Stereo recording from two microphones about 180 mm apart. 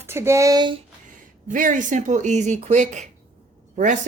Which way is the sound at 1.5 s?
45° right (ahead or behind).